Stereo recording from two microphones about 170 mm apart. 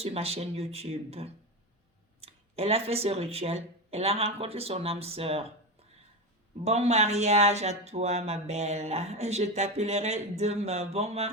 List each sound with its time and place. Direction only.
0.0 s speech: 35° right (ahead or behind)
6.7 s speech: 40° right (ahead or behind)